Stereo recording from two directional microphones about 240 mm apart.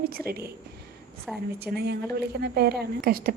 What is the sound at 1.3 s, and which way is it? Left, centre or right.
Speech, centre.